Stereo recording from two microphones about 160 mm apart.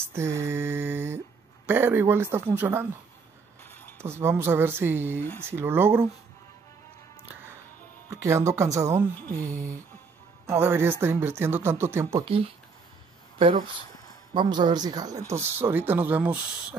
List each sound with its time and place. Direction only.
0.0 s mantra: 15° right (ahead or behind)
1.7 s speech: 15° right (ahead or behind)
3.6 s a sound: 10° left (ahead or behind)
4.0 s speech: 15° right (ahead or behind)
8.1 s speech: 20° right (ahead or behind)
9.4 s a sound: 50° right (ahead or behind)
10.4 s speech: 15° right (ahead or behind)
14.3 s speech: 30° right (ahead or behind); by 16.4 s 10° right (ahead or behind)